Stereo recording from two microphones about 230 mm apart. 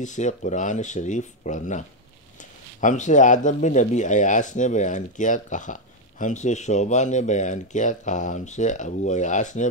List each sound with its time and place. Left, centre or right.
0.0 s speech: left